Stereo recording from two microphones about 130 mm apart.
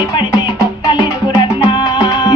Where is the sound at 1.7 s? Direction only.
30° left (ahead or behind).